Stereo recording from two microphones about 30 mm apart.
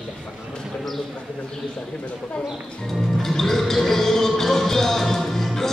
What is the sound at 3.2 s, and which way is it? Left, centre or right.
Music, centre.